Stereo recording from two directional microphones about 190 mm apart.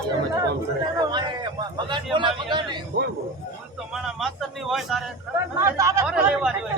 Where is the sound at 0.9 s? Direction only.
25° right (ahead or behind).